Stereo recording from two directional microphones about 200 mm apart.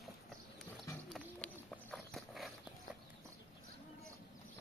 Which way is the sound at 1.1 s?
Centre (ahead or behind).